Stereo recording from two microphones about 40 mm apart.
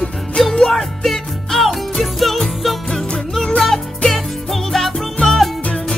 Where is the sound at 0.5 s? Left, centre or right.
Centre.